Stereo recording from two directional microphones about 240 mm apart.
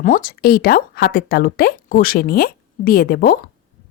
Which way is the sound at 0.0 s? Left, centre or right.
Left.